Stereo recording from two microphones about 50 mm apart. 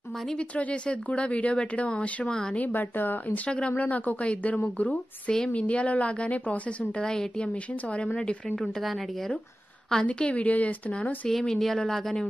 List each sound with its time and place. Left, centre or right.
0.4 s speech: left
2.6 s a woman's voice: left
3.4 s a woman's voice: left
4.2 s speech: left
7.1 s speech: centre
10.0 s speech: left
11.2 s speech: centre